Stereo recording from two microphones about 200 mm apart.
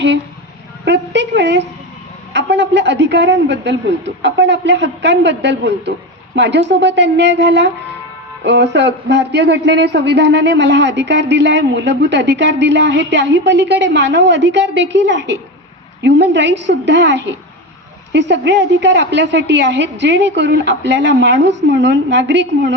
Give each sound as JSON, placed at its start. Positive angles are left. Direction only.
{"t": 0.9, "sound": "a man's voice", "side_deg": -60}